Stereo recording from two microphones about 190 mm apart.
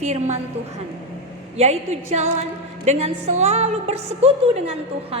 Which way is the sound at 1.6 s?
35° right (ahead or behind).